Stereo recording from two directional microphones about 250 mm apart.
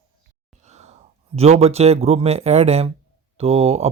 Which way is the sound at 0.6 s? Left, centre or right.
Right.